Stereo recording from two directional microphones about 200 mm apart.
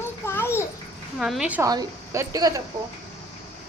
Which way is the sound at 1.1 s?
Centre (ahead or behind).